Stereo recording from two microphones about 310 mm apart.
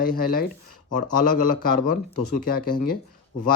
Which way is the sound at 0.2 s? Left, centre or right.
Left.